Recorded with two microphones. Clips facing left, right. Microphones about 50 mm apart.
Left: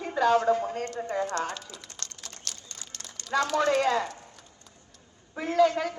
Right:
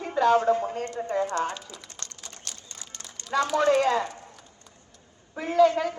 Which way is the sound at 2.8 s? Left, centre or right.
Right.